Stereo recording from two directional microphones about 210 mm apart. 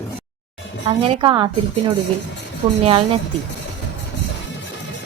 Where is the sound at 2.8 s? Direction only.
25° right (ahead or behind).